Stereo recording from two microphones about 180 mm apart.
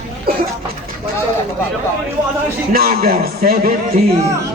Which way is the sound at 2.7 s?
55° right (ahead or behind).